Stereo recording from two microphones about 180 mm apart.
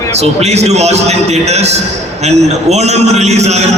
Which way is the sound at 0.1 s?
35° right (ahead or behind).